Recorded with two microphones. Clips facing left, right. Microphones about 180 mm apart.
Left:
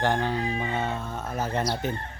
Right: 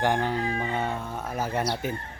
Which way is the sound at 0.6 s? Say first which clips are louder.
Even; 10° right (ahead or behind).